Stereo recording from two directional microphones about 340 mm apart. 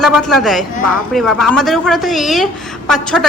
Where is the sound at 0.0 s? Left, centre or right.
Centre.